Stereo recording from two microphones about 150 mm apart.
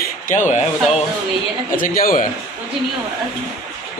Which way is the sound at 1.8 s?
65° left (ahead or behind).